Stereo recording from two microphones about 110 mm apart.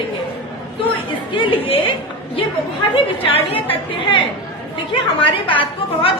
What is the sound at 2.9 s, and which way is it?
Speech, 55° left (ahead or behind).